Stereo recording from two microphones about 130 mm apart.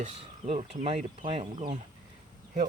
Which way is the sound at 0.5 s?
45° right (ahead or behind).